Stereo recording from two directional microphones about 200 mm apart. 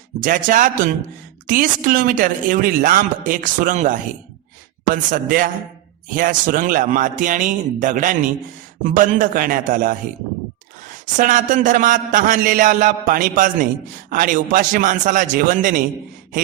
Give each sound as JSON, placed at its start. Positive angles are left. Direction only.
{"t": 0.2, "sound": "speech", "side_deg": -40}
{"t": 5.1, "sound": "a man's voice", "side_deg": -40}
{"t": 11.2, "sound": "a man's voice", "side_deg": -40}